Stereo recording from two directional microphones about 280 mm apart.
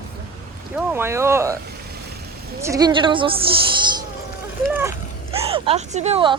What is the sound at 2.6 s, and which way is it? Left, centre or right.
Speech, centre.